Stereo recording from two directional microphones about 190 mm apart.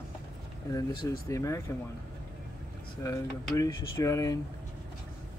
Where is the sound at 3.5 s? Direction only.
15° left (ahead or behind).